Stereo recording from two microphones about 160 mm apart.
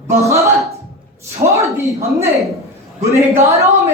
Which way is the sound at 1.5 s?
20° right (ahead or behind).